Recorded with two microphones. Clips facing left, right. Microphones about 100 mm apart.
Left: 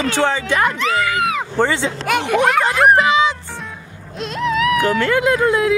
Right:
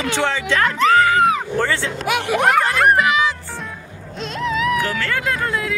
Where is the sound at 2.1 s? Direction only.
5° right (ahead or behind).